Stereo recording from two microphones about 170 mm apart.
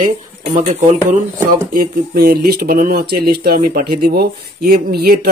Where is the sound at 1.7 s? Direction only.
60° right (ahead or behind).